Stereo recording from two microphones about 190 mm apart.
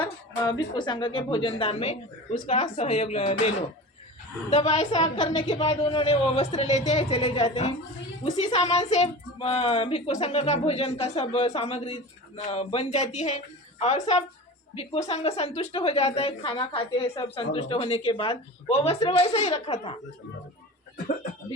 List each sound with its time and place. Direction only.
0.7 s a woman's voice: 25° left (ahead or behind)
4.9 s a woman's voice: 35° left (ahead or behind)